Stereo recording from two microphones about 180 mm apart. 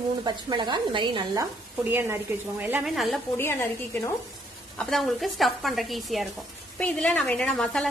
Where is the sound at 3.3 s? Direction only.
15° left (ahead or behind).